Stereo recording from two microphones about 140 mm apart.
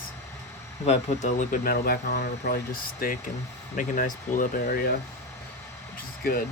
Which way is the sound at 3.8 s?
70° left (ahead or behind).